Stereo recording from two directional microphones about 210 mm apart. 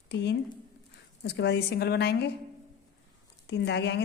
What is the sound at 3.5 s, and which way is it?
Speech, 55° left (ahead or behind).